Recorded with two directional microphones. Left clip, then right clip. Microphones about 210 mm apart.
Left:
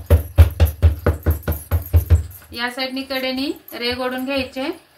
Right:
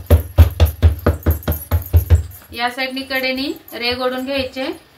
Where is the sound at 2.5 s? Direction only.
20° left (ahead or behind).